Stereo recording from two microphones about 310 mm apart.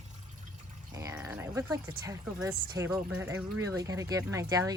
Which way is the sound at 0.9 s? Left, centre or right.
Centre.